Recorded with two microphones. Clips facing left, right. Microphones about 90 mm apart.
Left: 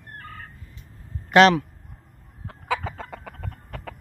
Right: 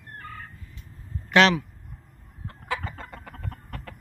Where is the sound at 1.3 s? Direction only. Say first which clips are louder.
Left 4 dB; 35° left (ahead or behind).